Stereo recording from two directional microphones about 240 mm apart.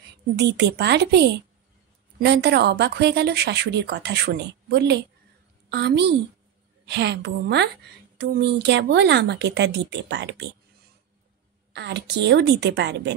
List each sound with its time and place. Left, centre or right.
0.6 s speech: right
11.7 s speech: right